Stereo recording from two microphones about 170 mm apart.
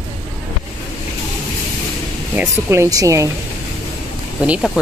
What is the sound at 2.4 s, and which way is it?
Speech, 15° right (ahead or behind).